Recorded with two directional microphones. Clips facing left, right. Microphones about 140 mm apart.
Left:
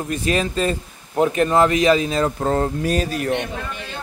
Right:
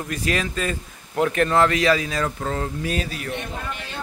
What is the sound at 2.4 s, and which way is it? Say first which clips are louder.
Speech: left 6 dB; 40° left (ahead or behind).